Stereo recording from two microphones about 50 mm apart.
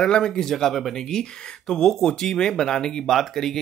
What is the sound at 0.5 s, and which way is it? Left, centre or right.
Speech, centre.